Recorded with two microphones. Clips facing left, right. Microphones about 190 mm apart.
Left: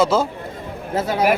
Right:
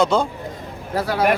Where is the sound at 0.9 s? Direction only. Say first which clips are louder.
Left 1 dB; 20° left (ahead or behind).